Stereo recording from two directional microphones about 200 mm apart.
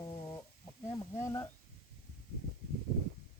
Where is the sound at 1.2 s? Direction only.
15° left (ahead or behind).